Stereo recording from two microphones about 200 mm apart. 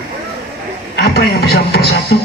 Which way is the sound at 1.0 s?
50° left (ahead or behind).